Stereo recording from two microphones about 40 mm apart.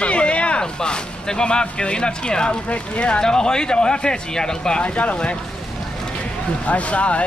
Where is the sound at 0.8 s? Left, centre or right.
Centre.